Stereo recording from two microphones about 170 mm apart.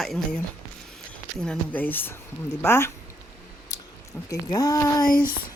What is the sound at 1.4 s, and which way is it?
Speech, 10° left (ahead or behind).